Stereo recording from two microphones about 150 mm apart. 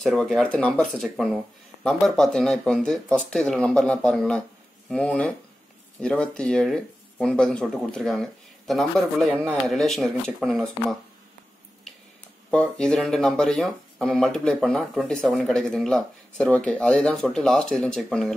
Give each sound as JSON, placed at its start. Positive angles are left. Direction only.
{"t": 0.0, "sound": "speech", "side_deg": 5}
{"t": 12.4, "sound": "speech", "side_deg": 5}